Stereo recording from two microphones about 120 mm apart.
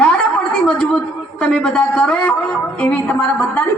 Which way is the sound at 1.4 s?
10° left (ahead or behind).